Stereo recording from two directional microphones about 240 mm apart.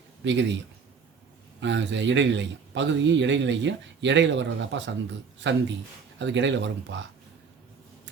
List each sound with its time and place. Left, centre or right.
0.3 s a man's voice: right
1.6 s a man's voice: right